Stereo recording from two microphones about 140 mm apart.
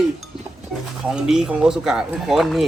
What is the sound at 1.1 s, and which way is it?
Speech, 5° right (ahead or behind).